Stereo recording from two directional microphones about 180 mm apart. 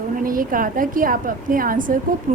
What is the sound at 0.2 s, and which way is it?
Speech, 50° right (ahead or behind).